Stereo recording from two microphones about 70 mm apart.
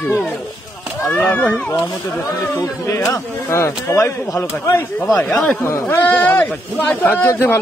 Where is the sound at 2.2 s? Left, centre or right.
Left.